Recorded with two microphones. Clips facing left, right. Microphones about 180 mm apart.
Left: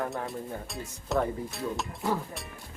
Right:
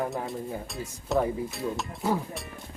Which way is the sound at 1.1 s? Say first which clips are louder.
Right 2 dB; centre (ahead or behind).